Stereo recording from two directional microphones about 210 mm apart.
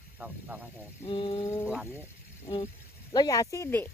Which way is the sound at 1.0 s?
25° left (ahead or behind).